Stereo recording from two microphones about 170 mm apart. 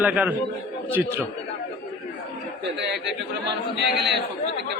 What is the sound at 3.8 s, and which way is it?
Speech, 80° right.